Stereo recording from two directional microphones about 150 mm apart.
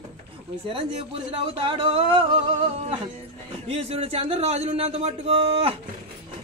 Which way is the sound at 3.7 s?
40° right (ahead or behind).